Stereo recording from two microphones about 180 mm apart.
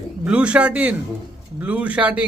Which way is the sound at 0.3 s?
5° right (ahead or behind).